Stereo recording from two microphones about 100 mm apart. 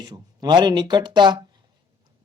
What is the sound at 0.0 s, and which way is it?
Speech, 45° right (ahead or behind).